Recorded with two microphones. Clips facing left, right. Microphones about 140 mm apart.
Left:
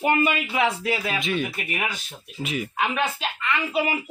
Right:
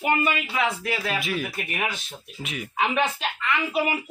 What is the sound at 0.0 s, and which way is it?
Speech, 30° left (ahead or behind).